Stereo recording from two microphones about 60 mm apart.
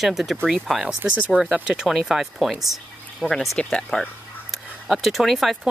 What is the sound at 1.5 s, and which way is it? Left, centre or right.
Speech, centre.